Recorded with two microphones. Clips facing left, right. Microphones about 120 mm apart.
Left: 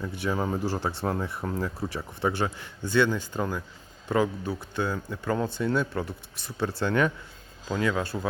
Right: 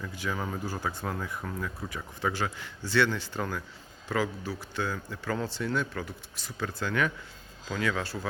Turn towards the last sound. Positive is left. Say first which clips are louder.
# left 4 dB
turn(degrees=25)  # may be behind; listen again after turning